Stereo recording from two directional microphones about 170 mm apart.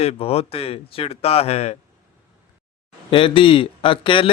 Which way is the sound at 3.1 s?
30° left (ahead or behind).